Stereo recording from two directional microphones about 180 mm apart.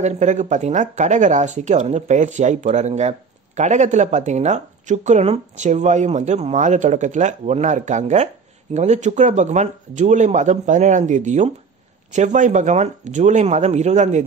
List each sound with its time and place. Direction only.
0.0 s speech: 40° right (ahead or behind)